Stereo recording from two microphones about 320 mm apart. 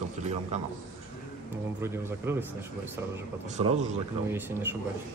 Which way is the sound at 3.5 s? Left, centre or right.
Right.